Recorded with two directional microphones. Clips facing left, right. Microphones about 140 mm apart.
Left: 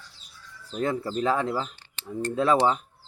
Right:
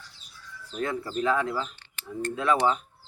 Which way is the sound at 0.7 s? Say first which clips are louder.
Left 3 dB; 25° left (ahead or behind).